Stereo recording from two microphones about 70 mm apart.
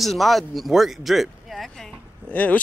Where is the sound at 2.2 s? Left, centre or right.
Left.